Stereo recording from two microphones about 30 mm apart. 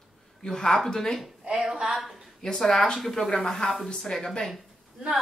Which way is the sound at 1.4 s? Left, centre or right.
Right.